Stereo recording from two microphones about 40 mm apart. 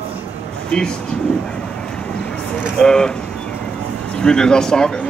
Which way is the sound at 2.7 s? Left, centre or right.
Centre.